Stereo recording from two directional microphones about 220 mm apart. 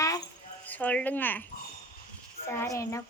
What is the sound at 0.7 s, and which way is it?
Speech, 5° left (ahead or behind).